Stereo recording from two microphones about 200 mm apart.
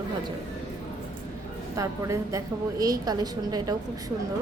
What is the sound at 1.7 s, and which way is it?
A woman's voice, 15° right (ahead or behind).